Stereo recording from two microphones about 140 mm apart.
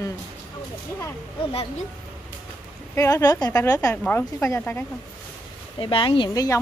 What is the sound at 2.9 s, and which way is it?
Speech, 20° left (ahead or behind).